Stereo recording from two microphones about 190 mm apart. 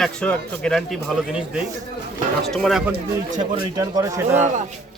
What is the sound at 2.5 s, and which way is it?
Speech, centre (ahead or behind).